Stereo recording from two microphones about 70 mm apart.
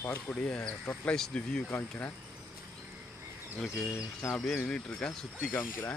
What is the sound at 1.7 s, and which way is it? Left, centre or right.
Speech, left.